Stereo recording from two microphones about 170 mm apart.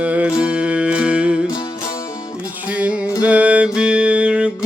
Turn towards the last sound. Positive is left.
turn(degrees=-5)  # may be behind; listen again after turning